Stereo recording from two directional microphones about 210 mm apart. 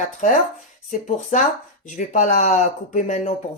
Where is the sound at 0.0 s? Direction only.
35° left (ahead or behind).